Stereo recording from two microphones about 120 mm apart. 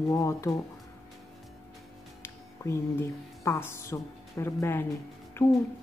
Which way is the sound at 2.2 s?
20° left (ahead or behind).